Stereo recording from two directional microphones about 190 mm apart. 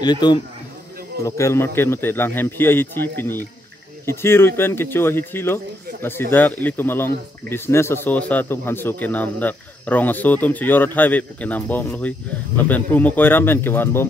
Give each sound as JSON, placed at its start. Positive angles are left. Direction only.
{"t": 0.0, "sound": "a man's voice", "side_deg": 20}